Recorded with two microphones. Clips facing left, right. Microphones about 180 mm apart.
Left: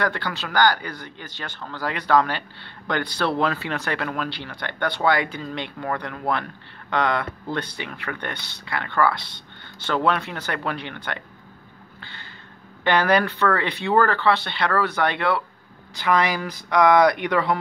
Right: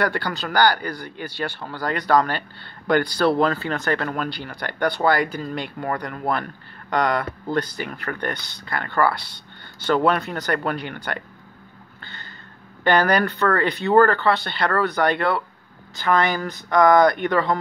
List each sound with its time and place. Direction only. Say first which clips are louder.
0.0 s speech: right 2 dB; 5° right (ahead or behind)
12.8 s speech: right 1 dB; centre (ahead or behind)